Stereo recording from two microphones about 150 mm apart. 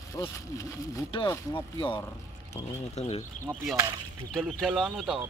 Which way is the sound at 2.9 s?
45° left (ahead or behind).